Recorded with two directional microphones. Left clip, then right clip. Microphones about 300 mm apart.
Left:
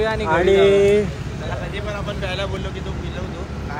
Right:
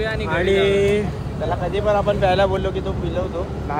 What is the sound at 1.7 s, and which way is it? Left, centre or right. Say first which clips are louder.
Speech: right 9 dB; right.